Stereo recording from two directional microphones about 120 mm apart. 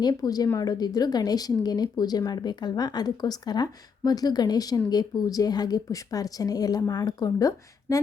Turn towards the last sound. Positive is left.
turn(degrees=30)  # may be behind; listen again after turning